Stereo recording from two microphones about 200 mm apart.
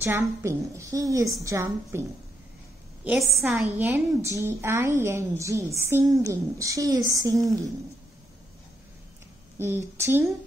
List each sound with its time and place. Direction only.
0.0 s a woman's voice: 15° right (ahead or behind)
3.0 s a woman's voice: 5° right (ahead or behind)
9.6 s a woman's voice: 10° right (ahead or behind)